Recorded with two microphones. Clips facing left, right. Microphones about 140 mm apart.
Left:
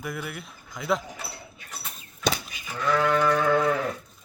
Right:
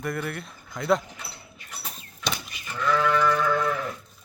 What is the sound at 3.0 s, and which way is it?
Sheep, 50° left (ahead or behind).